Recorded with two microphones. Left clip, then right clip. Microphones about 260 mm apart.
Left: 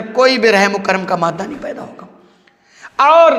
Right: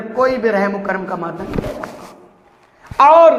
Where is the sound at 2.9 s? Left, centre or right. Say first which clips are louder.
Right 1 dB; left.